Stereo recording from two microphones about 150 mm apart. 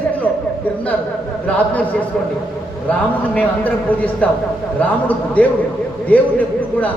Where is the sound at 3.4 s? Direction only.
10° left (ahead or behind).